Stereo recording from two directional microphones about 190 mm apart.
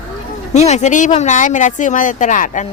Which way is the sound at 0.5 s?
35° left (ahead or behind).